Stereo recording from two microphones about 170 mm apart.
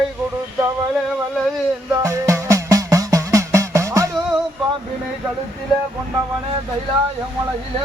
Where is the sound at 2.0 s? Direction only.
15° right (ahead or behind).